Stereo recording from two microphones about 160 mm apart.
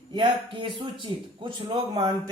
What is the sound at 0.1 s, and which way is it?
Speech, 30° right (ahead or behind).